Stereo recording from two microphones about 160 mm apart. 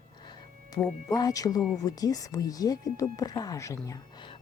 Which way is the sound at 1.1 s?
20° left (ahead or behind).